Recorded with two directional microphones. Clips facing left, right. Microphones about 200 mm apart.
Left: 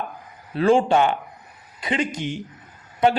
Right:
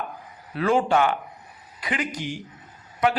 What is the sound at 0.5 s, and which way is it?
A man's voice, 30° left (ahead or behind).